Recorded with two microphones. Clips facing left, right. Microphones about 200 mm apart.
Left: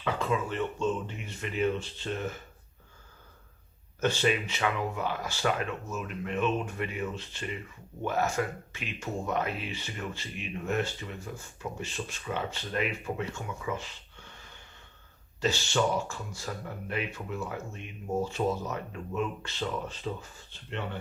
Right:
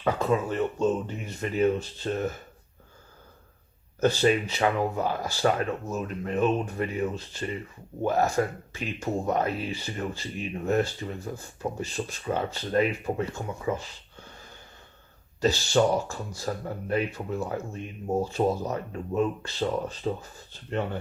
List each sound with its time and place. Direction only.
0.0 s speech: 40° right (ahead or behind)
4.0 s speech: 35° right (ahead or behind)